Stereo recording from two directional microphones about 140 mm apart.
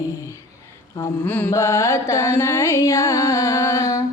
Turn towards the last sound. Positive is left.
turn(degrees=20)  # may be behind; listen again after turning